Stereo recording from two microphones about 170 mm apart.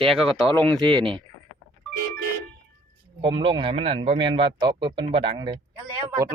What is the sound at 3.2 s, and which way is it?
Speech, 30° right (ahead or behind).